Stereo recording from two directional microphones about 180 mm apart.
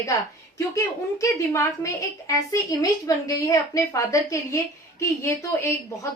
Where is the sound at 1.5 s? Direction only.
15° left (ahead or behind).